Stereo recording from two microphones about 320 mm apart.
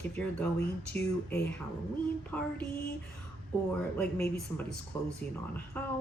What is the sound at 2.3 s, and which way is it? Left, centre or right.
Speech, centre.